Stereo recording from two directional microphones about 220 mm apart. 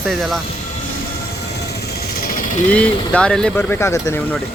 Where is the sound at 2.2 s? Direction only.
40° left (ahead or behind).